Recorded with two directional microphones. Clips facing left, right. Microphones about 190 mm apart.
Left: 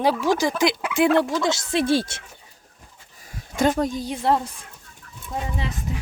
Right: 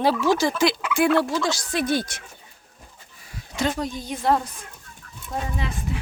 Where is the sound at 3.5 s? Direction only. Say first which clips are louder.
Left 5 dB; 50° left (ahead or behind); by 4.5 s 30° left (ahead or behind).